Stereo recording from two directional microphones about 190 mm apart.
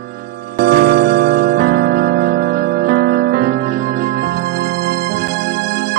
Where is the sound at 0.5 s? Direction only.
55° right (ahead or behind).